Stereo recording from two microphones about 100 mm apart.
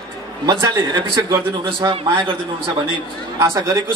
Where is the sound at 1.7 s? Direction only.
65° right (ahead or behind).